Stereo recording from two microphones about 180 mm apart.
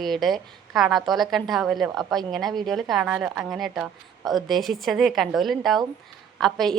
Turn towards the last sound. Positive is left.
turn(degrees=0)  # may be behind; listen again after turning